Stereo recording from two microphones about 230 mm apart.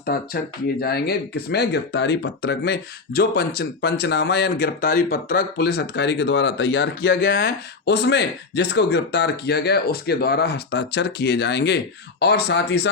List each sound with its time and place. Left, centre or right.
0.1 s speech: left